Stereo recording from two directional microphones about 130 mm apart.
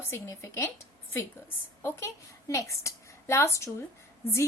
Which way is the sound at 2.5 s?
25° left (ahead or behind).